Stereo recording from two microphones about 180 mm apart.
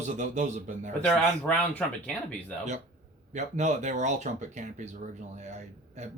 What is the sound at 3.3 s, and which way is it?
Speech, 40° right (ahead or behind).